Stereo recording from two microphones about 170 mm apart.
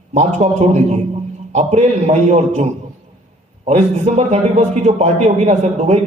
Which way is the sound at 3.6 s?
45° right (ahead or behind).